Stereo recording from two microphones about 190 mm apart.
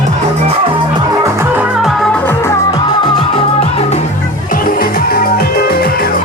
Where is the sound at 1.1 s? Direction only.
15° right (ahead or behind); by 3.0 s 15° left (ahead or behind).